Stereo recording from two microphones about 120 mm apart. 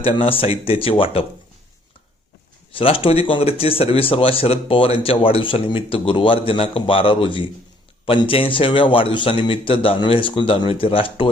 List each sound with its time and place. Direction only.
0.0 s a man's voice: 50° left (ahead or behind)
2.7 s a man's voice: 50° left (ahead or behind)